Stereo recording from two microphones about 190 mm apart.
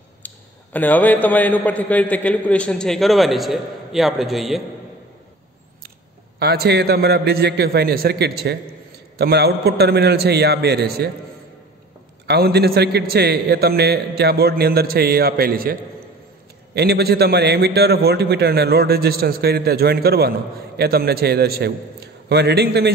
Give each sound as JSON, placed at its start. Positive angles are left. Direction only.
{"t": 0.2, "sound": "a sound", "side_deg": 10}
{"t": 0.7, "sound": "a man's voice", "side_deg": 10}
{"t": 6.4, "sound": "a man's voice", "side_deg": -55}
{"t": 12.3, "sound": "a man's voice", "side_deg": -60}